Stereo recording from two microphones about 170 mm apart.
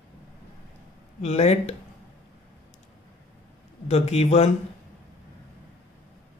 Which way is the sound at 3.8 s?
40° left (ahead or behind).